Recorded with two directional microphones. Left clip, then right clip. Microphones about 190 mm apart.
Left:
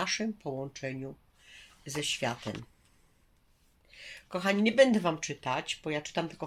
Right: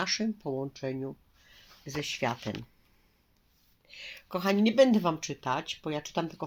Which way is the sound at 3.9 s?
10° left (ahead or behind).